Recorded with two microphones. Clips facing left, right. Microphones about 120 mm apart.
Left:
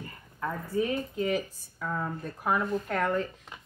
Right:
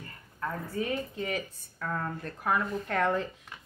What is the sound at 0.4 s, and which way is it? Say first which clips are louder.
Speech: left 3 dB; 5° left (ahead or behind).